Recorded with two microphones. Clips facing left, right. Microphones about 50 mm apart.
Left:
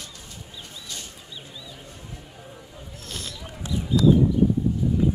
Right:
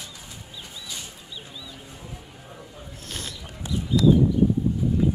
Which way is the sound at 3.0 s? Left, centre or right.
Centre.